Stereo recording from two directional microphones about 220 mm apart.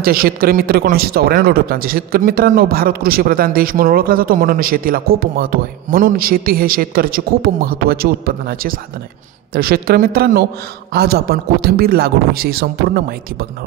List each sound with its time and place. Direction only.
0.0 s a man's voice: 40° right (ahead or behind)